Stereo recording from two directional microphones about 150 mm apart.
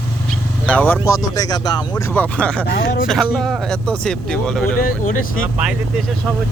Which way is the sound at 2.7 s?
75° left (ahead or behind).